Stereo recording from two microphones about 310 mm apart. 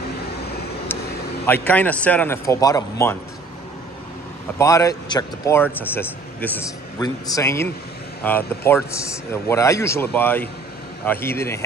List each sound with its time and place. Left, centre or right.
1.4 s a man's voice: centre
4.6 s a man's voice: centre